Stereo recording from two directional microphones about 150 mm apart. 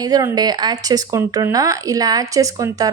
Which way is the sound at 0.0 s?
25° right (ahead or behind).